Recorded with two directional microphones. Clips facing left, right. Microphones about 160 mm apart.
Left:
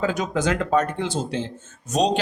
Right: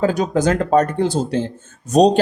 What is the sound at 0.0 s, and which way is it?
Speech, 35° right (ahead or behind).